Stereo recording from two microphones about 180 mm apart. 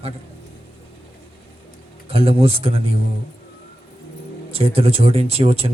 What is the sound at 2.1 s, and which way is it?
Speech, 30° right (ahead or behind).